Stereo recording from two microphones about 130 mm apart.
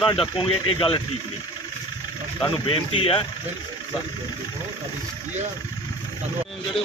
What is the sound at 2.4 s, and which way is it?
Speech, 40° left (ahead or behind).